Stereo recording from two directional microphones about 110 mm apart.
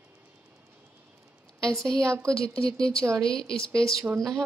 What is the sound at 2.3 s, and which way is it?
Speech, 5° left (ahead or behind).